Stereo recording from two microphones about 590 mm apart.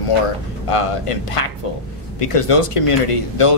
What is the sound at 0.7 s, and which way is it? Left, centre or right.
Speech, left.